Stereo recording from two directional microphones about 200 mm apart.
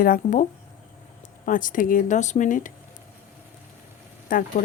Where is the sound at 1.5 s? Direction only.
40° left (ahead or behind).